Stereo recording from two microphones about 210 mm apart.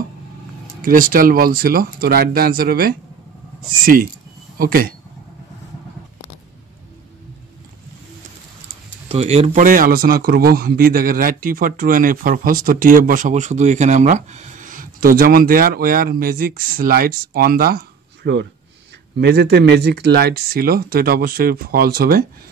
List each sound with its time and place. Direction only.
0.8 s speech: 40° right (ahead or behind)
9.1 s speech: 30° right (ahead or behind); by 22.2 s 45° right (ahead or behind)